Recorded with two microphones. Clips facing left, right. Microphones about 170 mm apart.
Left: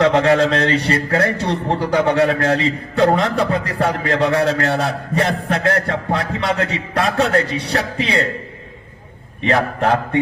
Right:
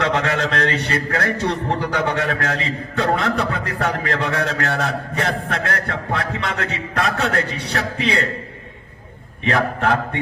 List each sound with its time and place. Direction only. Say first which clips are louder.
0.0 s a man's voice: left 7 dB; 30° left (ahead or behind)
9.5 s a man's voice: left 2 dB; 30° left (ahead or behind)